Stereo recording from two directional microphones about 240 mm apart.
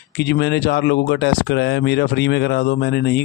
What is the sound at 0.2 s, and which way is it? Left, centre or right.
Speech, left.